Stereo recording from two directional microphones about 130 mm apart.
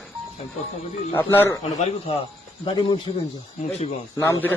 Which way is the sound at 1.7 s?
55° left (ahead or behind).